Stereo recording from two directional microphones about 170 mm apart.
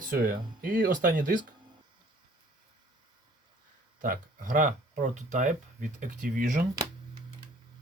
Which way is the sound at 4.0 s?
50° right (ahead or behind).